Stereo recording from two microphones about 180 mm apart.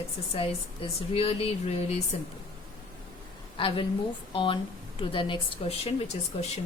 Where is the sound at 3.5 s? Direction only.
30° left (ahead or behind).